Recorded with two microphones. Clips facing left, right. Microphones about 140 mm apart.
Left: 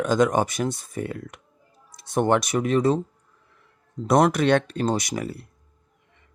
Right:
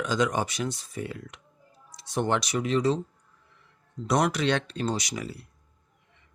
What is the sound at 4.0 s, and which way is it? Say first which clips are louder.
Speech: left 6 dB; 45° left (ahead or behind).